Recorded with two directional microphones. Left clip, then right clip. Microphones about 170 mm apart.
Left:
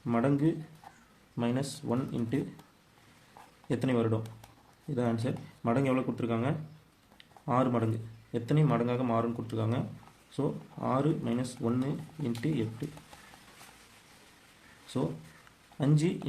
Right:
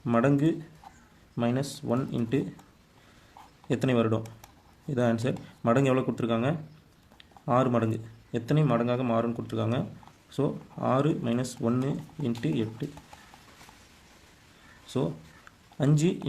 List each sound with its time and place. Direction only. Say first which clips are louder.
0.0 s speech: right 4 dB; 30° right (ahead or behind)
3.7 s speech: right 4 dB; 30° right (ahead or behind)
15.8 s speech: right 3 dB; 25° right (ahead or behind)